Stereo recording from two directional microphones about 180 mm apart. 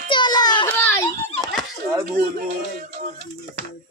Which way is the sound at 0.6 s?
10° left (ahead or behind).